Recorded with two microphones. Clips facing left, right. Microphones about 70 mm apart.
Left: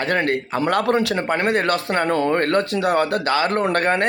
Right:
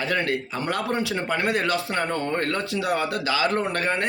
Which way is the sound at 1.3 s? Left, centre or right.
Left.